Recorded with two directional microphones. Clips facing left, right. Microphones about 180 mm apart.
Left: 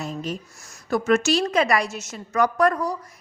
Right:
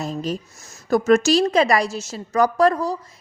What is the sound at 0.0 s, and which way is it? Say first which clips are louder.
A woman's voice: right 4 dB; 35° right (ahead or behind).